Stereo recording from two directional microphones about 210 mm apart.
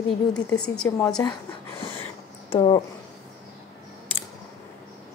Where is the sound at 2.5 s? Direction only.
25° left (ahead or behind).